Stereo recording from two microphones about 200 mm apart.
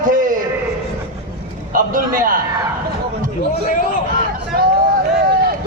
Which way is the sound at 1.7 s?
45° right (ahead or behind).